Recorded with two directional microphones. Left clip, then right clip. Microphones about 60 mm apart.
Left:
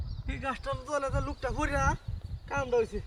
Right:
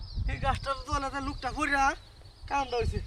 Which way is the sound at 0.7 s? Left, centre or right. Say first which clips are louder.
Even; right.